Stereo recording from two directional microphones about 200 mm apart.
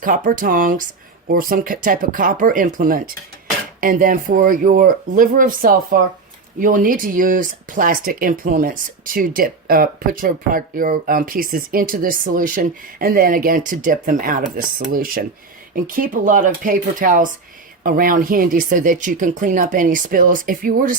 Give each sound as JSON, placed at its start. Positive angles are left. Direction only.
{"t": 0.0, "sound": "speech", "side_deg": -40}